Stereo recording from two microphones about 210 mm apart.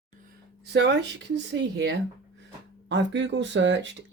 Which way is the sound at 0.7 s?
55° right (ahead or behind).